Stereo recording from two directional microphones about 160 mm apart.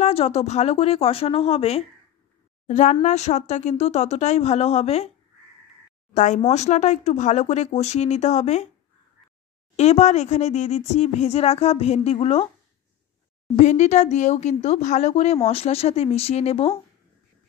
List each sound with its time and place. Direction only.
0.0 s speech: 40° left (ahead or behind)
6.1 s speech: 50° left (ahead or behind)
9.8 s speech: 45° left (ahead or behind)
13.6 s speech: 45° left (ahead or behind)